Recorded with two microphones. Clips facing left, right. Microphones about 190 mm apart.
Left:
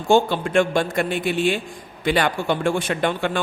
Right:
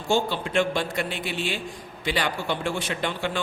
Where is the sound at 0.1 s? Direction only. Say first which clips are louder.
Left 7 dB; 50° left (ahead or behind).